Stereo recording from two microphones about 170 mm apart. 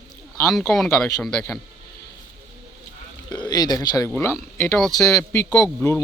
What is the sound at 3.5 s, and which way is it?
Speech, 25° left (ahead or behind).